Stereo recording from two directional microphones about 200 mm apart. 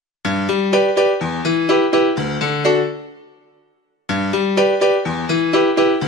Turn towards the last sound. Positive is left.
turn(degrees=0)  # may be behind; listen again after turning